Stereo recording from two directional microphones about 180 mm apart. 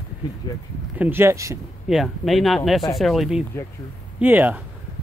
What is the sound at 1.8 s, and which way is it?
Speech, centre (ahead or behind).